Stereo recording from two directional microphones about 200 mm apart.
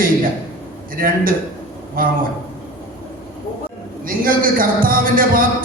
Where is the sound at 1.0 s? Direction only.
45° right (ahead or behind).